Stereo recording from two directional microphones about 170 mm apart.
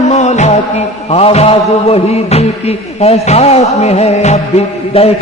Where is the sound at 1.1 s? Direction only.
35° left (ahead or behind).